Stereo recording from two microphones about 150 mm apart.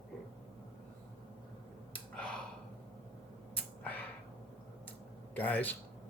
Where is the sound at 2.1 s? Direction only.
5° left (ahead or behind).